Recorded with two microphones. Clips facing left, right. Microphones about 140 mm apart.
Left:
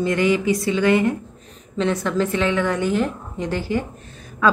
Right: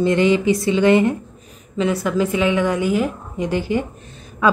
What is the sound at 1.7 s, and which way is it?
A woman's voice, 5° right (ahead or behind).